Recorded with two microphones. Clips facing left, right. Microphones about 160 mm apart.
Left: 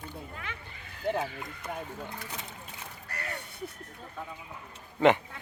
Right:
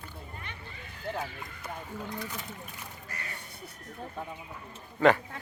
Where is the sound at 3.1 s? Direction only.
65° left (ahead or behind).